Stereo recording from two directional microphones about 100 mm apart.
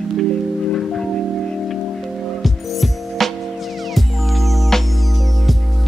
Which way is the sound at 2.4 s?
Centre (ahead or behind).